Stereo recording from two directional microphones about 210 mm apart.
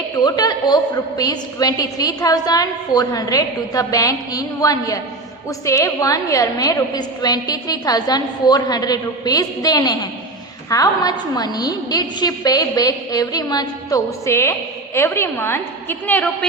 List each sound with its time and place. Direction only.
0.2 s a woman's voice: 20° left (ahead or behind)